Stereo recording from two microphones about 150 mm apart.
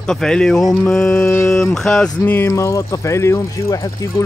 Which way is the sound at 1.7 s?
5° left (ahead or behind).